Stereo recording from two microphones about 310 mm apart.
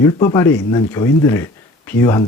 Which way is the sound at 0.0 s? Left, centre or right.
Centre.